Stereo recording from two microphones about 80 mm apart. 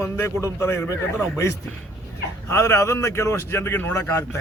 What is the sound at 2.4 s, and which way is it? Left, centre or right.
A man's voice, left.